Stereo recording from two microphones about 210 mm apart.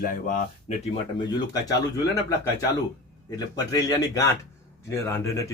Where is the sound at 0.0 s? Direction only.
40° left (ahead or behind).